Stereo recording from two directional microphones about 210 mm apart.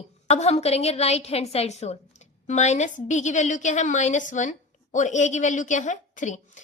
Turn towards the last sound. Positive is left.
turn(degrees=35)  # may be behind; listen again after turning